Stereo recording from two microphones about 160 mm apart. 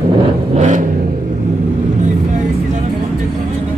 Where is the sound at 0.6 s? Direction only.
50° right (ahead or behind).